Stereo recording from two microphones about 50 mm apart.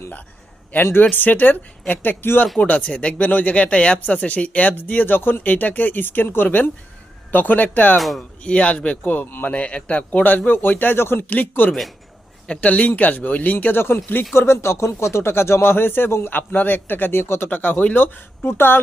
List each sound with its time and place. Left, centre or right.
0.7 s speech: left
2.6 s speech: left
7.9 s speech: centre
8.4 s speech: left
11.3 s speech: left
14.3 s a man's voice: left
17.5 s a man's voice: left